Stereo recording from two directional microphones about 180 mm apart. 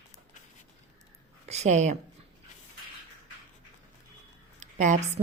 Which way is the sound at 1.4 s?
40° right (ahead or behind).